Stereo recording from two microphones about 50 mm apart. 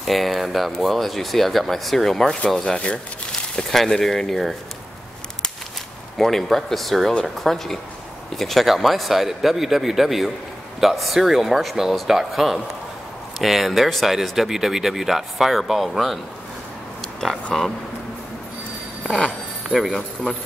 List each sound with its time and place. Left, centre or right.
0.0 s speech: centre
2.6 s speech: centre
3.7 s speech: centre
6.1 s speech: centre
17.5 s speech: centre
19.9 s speech: centre